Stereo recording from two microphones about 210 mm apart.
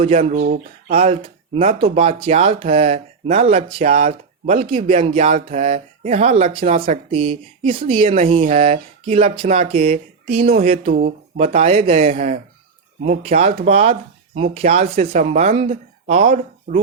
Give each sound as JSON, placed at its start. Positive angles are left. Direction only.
{"t": 0.0, "sound": "speech", "side_deg": -30}
{"t": 4.9, "sound": "speech", "side_deg": -30}
{"t": 10.4, "sound": "a sound", "side_deg": -45}
{"t": 10.7, "sound": "speech", "side_deg": -30}
{"t": 15.0, "sound": "speech", "side_deg": -40}
{"t": 16.2, "sound": "speech", "side_deg": -40}